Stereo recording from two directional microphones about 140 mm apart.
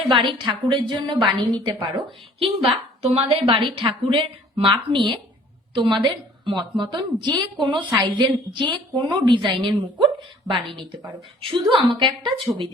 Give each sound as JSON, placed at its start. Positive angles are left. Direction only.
{"t": 0.1, "sound": "a woman's voice", "side_deg": -35}
{"t": 11.7, "sound": "a woman's voice", "side_deg": -35}